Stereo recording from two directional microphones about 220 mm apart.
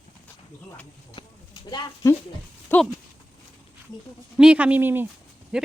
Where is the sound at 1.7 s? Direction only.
20° left (ahead or behind).